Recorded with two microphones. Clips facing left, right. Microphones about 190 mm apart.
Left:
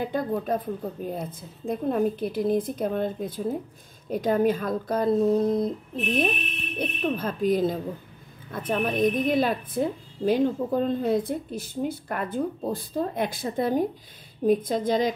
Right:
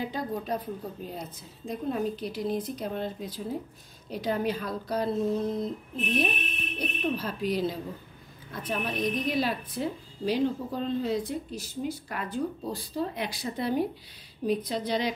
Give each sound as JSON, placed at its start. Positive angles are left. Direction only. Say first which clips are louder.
{"t": 0.0, "sound": "a woman's voice", "louder": "left 5 dB", "side_deg": 55}
{"t": 6.8, "sound": "a woman's voice", "louder": "left 3 dB", "side_deg": 50}